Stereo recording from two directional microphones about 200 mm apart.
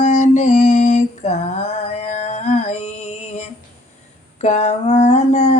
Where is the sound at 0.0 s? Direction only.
35° left (ahead or behind).